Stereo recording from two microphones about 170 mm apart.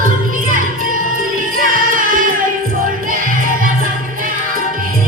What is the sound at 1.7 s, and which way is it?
Music, 55° right (ahead or behind).